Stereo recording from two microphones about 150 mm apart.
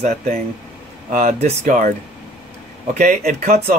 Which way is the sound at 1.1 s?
45° right (ahead or behind).